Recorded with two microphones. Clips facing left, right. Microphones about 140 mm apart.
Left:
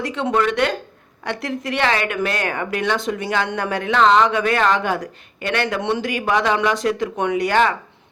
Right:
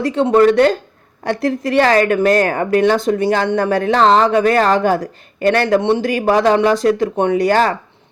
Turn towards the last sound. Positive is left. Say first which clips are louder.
# right 4 dB
turn(degrees=-35)  # may be behind; listen again after turning